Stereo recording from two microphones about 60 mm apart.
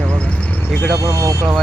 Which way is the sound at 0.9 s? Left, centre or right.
Right.